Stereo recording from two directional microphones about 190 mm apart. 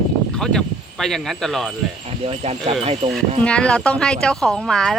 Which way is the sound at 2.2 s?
30° right (ahead or behind).